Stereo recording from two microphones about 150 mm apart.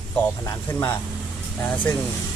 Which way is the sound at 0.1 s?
15° left (ahead or behind).